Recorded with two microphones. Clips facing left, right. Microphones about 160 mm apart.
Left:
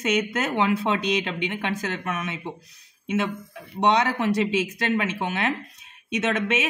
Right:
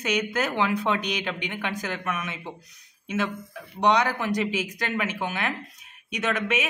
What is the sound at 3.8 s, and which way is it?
A man's voice, 25° left (ahead or behind).